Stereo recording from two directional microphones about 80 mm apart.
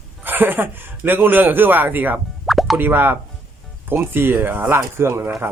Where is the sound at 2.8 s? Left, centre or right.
Right.